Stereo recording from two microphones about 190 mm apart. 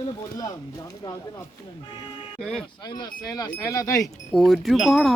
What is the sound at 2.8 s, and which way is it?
Speech, 20° left (ahead or behind).